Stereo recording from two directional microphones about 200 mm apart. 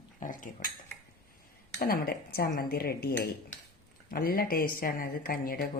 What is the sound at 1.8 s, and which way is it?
Speech, 50° left (ahead or behind).